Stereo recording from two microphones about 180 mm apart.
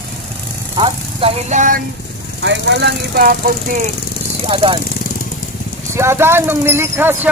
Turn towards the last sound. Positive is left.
turn(degrees=-15)  # may be behind; listen again after turning